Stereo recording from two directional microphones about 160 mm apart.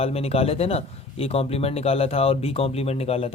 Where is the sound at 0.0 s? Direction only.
40° left (ahead or behind).